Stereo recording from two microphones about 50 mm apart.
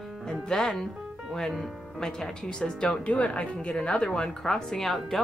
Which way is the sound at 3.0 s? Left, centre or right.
Left.